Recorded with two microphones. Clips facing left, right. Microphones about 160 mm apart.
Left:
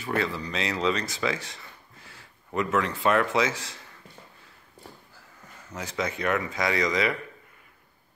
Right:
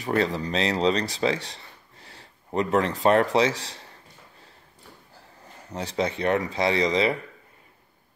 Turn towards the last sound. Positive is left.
turn(degrees=-30)  # may be behind; listen again after turning